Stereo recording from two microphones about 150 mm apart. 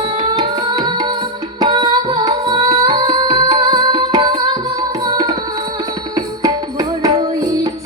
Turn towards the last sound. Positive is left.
turn(degrees=-25)  # may be behind; listen again after turning